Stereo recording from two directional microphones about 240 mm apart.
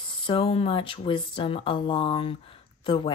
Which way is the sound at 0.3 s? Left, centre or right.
Left.